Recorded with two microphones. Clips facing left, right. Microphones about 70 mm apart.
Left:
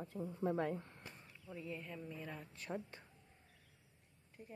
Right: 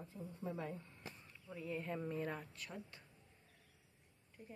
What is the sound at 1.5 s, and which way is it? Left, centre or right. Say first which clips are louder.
Speech: left 1 dB; centre.